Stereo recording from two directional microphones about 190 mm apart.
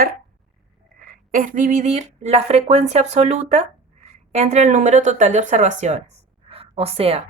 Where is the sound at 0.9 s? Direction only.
45° right (ahead or behind).